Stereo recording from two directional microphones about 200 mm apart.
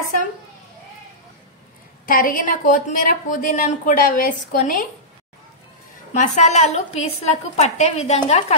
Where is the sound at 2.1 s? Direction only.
45° left (ahead or behind).